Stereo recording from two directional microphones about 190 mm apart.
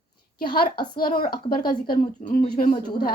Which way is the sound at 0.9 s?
50° left (ahead or behind).